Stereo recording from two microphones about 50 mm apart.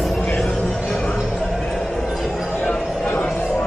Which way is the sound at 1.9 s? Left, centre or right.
Centre.